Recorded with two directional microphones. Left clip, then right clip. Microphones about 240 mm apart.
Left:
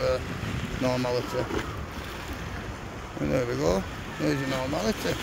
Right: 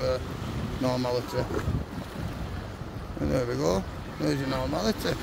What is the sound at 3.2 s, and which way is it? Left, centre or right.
Speech, centre.